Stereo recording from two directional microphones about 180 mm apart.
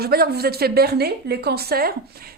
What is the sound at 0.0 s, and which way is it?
A woman's voice, 60° right (ahead or behind).